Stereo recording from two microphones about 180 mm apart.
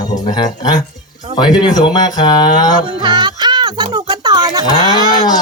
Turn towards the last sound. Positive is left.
turn(degrees=-25)  # may be behind; listen again after turning